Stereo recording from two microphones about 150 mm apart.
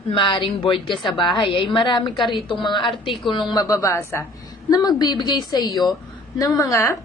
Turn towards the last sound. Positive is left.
turn(degrees=20)  # may be behind; listen again after turning